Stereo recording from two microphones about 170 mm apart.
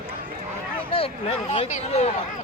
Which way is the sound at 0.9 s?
30° left (ahead or behind).